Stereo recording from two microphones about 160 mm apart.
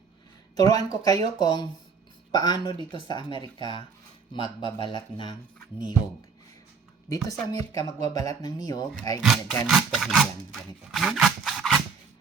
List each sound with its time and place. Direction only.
0.6 s speech: 25° left (ahead or behind)
7.1 s speech: 20° left (ahead or behind)
9.2 s rub: centre (ahead or behind)